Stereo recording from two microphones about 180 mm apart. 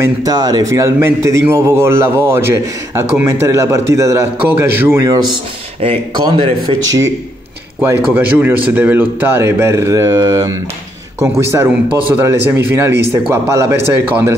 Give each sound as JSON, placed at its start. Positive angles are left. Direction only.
{"t": 0.0, "sound": "a man's voice", "side_deg": -20}
{"t": 8.1, "sound": "a man's voice", "side_deg": -10}